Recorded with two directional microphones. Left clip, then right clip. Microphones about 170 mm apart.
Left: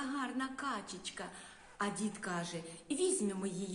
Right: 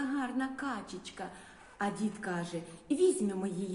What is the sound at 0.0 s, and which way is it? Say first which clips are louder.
A woman's voice: right 4 dB; 10° left (ahead or behind).